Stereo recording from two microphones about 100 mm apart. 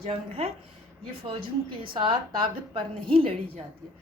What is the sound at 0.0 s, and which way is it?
Speech, 75° right (ahead or behind).